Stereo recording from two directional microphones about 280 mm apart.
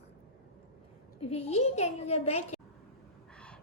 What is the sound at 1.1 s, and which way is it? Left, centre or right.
A child's voice, left.